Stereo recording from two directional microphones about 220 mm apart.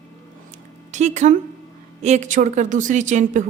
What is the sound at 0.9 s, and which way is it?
A woman's voice, 35° right (ahead or behind).